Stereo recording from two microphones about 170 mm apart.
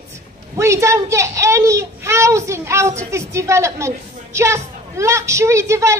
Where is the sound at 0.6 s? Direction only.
15° right (ahead or behind).